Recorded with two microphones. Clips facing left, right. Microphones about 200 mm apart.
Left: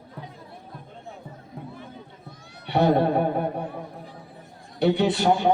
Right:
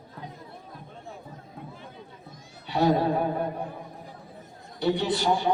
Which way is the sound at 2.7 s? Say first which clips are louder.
Left 3 dB; 60° left (ahead or behind).